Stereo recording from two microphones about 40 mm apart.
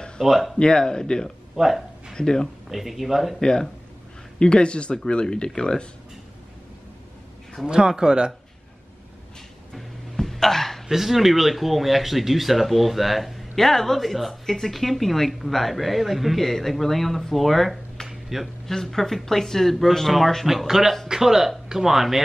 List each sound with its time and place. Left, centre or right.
0.2 s a woman's voice: centre
0.6 s speech: centre
1.6 s a woman's voice: centre
2.1 s speech: centre
2.7 s a woman's voice: centre
4.4 s speech: left
7.6 s speech: centre
9.8 s a sound: centre
10.9 s a woman's voice: centre
18.0 s a sound: centre
18.7 s speech: centre
20.4 s speech: centre